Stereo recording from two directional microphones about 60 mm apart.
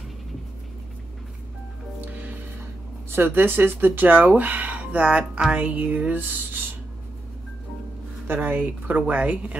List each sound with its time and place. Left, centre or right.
2.1 s music: right
3.1 s speech: right
8.4 s speech: right